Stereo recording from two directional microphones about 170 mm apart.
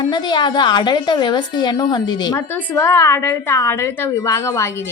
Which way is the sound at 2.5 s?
10° left (ahead or behind).